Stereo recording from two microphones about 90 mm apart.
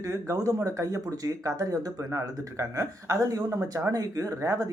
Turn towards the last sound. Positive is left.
turn(degrees=-35)  # may be behind; listen again after turning